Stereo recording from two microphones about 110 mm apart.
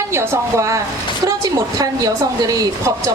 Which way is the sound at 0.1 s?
25° right (ahead or behind).